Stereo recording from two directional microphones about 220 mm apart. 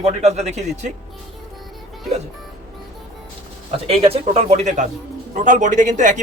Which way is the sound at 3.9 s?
30° right (ahead or behind).